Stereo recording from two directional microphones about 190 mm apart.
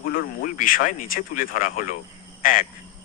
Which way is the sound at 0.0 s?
50° left (ahead or behind).